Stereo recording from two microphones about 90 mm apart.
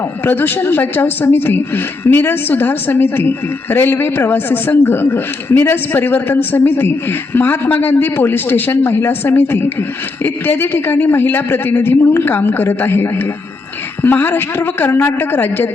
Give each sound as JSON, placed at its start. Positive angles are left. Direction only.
{"t": 0.0, "sound": "a woman's voice", "side_deg": 20}